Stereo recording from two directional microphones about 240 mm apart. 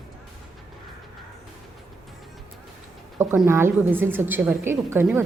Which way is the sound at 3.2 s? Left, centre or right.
Centre.